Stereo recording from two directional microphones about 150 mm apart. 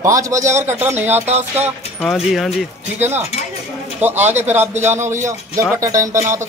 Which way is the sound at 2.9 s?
45° right (ahead or behind).